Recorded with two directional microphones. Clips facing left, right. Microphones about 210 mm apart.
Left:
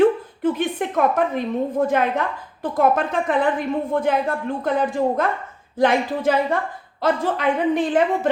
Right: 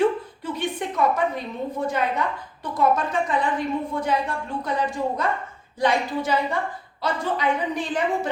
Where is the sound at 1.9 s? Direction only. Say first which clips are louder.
Left 4 dB; 55° left (ahead or behind).